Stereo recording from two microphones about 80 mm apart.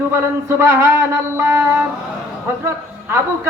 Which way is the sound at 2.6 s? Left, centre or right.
Right.